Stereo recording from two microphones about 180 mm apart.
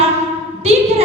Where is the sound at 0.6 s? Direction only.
35° right (ahead or behind).